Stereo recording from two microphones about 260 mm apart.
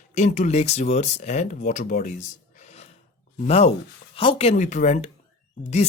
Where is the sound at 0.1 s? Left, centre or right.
Left.